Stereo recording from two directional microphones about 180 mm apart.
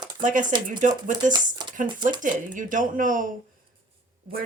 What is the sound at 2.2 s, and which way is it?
Speech, 45° right (ahead or behind).